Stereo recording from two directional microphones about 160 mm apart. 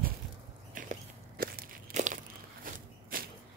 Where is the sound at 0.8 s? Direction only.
55° right (ahead or behind).